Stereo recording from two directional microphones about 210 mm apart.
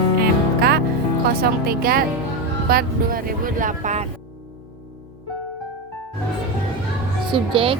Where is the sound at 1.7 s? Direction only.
45° right (ahead or behind).